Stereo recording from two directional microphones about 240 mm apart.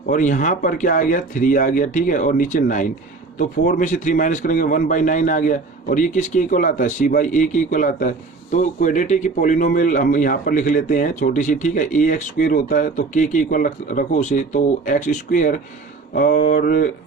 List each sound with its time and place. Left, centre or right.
0.1 s speech: left